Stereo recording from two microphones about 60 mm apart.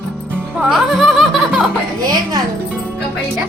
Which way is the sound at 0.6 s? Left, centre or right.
Centre.